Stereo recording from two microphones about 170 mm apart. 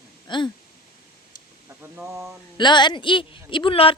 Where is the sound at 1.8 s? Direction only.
15° right (ahead or behind).